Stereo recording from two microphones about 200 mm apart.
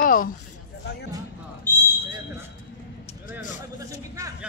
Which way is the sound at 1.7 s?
10° left (ahead or behind).